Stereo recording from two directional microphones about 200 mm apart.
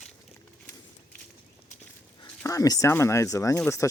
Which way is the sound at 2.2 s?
15° left (ahead or behind).